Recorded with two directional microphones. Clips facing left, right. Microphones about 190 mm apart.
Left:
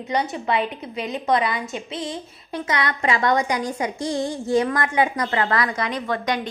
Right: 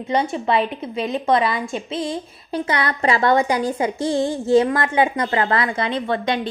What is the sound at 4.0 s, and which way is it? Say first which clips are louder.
Speech: right 4 dB; centre (ahead or behind).